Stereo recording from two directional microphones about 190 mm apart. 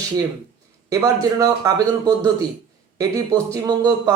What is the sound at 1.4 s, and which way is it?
Speech, 20° right (ahead or behind).